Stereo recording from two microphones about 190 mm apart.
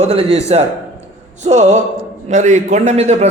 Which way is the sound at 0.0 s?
35° right (ahead or behind).